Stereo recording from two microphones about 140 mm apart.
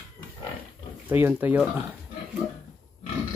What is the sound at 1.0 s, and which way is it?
Speech, 15° right (ahead or behind).